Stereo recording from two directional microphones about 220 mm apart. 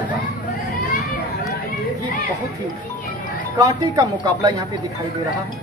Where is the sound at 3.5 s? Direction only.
15° right (ahead or behind).